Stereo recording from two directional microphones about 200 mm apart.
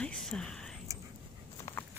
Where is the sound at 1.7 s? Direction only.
15° left (ahead or behind).